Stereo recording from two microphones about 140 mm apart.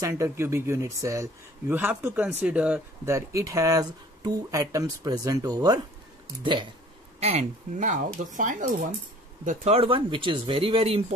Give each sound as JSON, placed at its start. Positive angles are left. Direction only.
{"t": 0.0, "sound": "speech", "side_deg": -20}
{"t": 3.1, "sound": "speech", "side_deg": -20}
{"t": 7.2, "sound": "speech", "side_deg": -50}
{"t": 9.8, "sound": "speech", "side_deg": -40}